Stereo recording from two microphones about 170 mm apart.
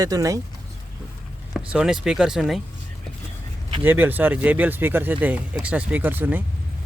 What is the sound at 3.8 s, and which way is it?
Speech, 10° right (ahead or behind).